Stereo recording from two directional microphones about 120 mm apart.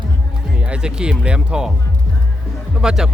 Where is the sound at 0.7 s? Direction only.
10° right (ahead or behind).